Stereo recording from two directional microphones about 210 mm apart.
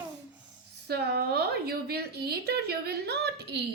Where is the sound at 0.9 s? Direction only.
50° right (ahead or behind).